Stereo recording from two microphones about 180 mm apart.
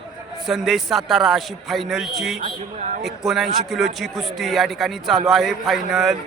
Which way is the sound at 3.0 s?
Centre (ahead or behind).